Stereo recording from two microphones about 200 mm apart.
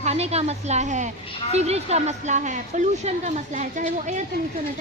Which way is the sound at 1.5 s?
30° right (ahead or behind).